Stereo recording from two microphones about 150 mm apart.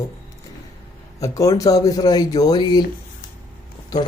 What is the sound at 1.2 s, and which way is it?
Speech, 20° left (ahead or behind).